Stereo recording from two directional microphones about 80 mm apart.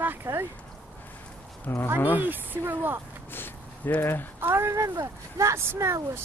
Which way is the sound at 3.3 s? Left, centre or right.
Left.